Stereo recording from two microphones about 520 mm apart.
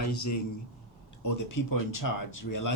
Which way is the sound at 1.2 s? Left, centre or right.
Left.